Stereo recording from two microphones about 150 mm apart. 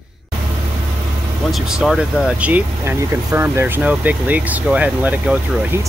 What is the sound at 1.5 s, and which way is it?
Speech, 5° right (ahead or behind).